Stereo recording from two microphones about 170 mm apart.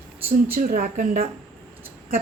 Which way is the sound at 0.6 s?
55° right (ahead or behind).